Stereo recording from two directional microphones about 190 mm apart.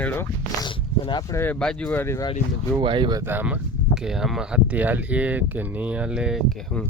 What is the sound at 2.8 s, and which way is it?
Speech, 25° right (ahead or behind).